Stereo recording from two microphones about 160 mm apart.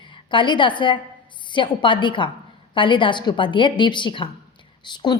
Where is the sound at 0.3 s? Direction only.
30° left (ahead or behind).